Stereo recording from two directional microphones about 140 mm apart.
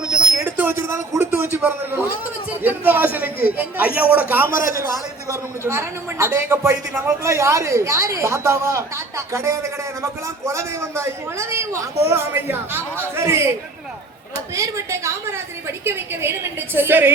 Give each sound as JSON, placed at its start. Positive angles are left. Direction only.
{"t": 0.5, "sound": "a man's voice", "side_deg": -15}
{"t": 4.5, "sound": "a man's voice", "side_deg": 75}
{"t": 5.3, "sound": "a man's voice", "side_deg": -20}
{"t": 14.5, "sound": "a man's voice", "side_deg": -20}